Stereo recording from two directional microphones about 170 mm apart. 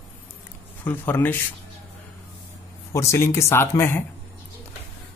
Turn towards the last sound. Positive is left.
turn(degrees=15)  # may be behind; listen again after turning